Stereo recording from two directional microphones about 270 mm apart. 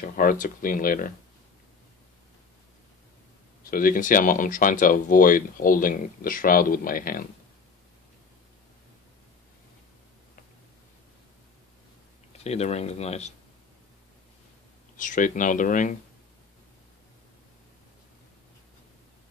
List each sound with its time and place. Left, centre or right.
0.0 s speech: left
3.7 s speech: left
12.3 s speech: left
15.0 s speech: left